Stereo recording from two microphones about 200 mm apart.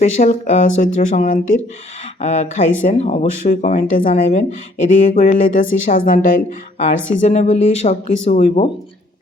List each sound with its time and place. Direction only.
0.0 s speech: 35° left (ahead or behind)